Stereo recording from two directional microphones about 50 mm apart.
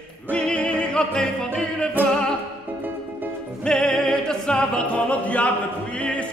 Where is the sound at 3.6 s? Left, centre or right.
Centre.